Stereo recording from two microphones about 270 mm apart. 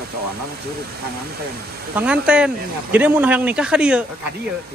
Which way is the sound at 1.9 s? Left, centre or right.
Centre.